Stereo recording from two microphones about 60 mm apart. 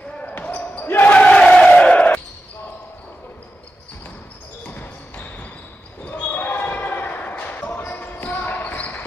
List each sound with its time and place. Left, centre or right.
0.3 s basketball bounce: left
1.2 s a sound: centre
4.6 s basketball bounce: left